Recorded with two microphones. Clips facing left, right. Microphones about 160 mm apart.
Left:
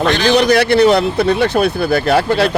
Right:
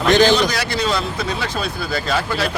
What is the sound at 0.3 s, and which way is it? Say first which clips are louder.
Speech: left 7 dB; 60° left (ahead or behind).